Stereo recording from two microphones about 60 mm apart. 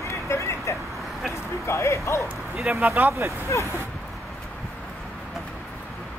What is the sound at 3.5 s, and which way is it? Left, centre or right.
Speech, left.